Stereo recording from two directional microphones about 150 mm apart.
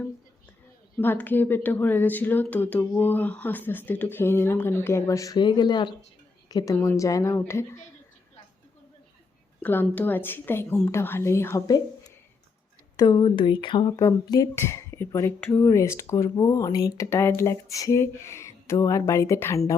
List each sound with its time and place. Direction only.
0.9 s a woman's voice: 10° left (ahead or behind)
9.6 s speech: 10° left (ahead or behind)